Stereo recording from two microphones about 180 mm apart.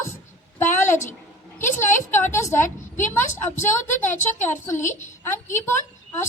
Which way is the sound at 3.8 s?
45° left (ahead or behind).